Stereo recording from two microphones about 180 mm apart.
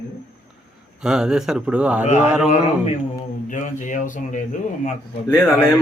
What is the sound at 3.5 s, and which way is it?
Speech, 45° left (ahead or behind).